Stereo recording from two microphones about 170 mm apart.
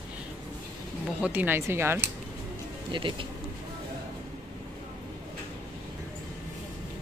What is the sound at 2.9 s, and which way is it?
Speech, 30° right (ahead or behind).